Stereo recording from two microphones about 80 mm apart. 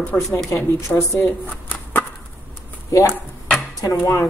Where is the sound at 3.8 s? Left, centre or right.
Left.